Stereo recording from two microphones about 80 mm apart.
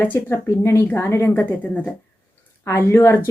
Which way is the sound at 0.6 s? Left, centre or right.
Left.